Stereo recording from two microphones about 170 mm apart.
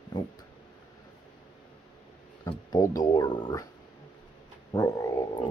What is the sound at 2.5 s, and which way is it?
Speech, 20° left (ahead or behind).